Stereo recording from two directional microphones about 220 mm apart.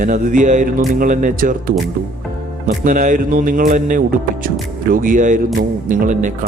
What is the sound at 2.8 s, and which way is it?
A man's voice, 35° right (ahead or behind).